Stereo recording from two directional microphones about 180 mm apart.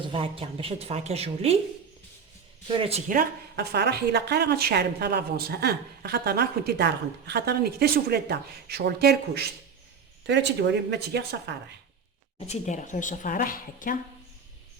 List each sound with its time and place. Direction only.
0.0 s a woman's voice: 30° right (ahead or behind)
2.6 s a woman's voice: 30° right (ahead or behind)
3.1 s a woman's voice: 55° right (ahead or behind)
10.2 s speech: 75° right (ahead or behind)
12.4 s a woman's voice: 40° left (ahead or behind)